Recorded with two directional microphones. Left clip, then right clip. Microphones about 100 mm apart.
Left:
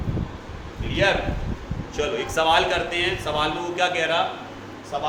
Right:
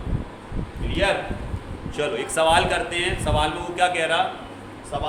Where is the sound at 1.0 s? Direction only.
45° right (ahead or behind).